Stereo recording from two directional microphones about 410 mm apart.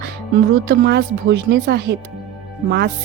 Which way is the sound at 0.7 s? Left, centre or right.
Right.